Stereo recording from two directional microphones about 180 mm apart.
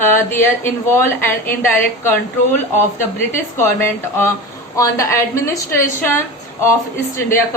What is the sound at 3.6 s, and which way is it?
A woman's voice, 10° left (ahead or behind).